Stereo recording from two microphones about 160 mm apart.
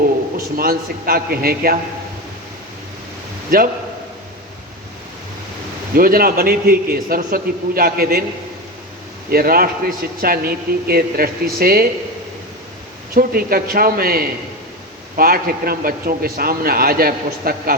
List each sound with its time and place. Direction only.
0.3 s a man's voice: 65° right (ahead or behind)
3.5 s a man's voice: 60° right (ahead or behind)
5.9 s a man's voice: 65° right (ahead or behind)
9.3 s a man's voice: 65° right (ahead or behind)
13.1 s a man's voice: 65° right (ahead or behind)